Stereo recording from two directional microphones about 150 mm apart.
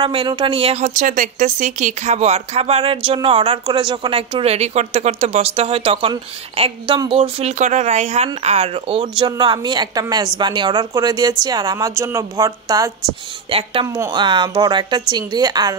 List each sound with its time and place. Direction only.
0.0 s a woman's voice: 30° right (ahead or behind)
0.8 s a woman's voice: 60° right (ahead or behind); by 9.1 s 40° right (ahead or behind)
9.2 s a woman's voice: 30° right (ahead or behind)
13.5 s a woman's voice: 35° right (ahead or behind)
13.8 s a woman's voice: 20° right (ahead or behind)